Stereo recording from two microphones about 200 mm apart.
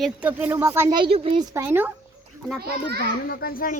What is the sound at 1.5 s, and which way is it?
Speech, 10° right (ahead or behind).